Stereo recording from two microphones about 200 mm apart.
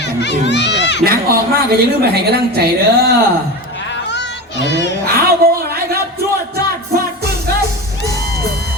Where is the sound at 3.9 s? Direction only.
60° left (ahead or behind).